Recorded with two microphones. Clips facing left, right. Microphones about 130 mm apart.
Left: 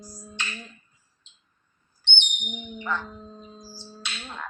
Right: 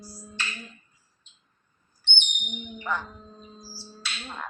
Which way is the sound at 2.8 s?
15° right (ahead or behind).